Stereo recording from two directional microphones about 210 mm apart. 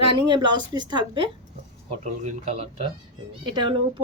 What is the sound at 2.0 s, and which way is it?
A woman's voice, 35° right (ahead or behind).